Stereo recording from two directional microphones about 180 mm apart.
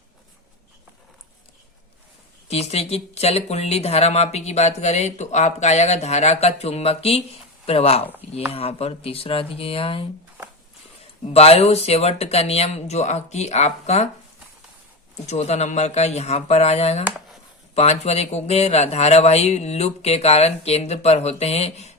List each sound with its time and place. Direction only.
2.5 s speech: 35° left (ahead or behind)
11.3 s speech: 35° left (ahead or behind)
15.3 s speech: 35° left (ahead or behind)
17.1 s a sound: 5° right (ahead or behind)
17.7 s speech: 35° left (ahead or behind)